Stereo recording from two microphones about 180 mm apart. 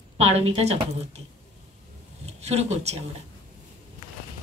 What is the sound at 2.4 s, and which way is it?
Speech, 35° right (ahead or behind).